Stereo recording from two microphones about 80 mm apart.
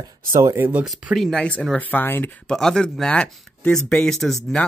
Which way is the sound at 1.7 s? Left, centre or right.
Left.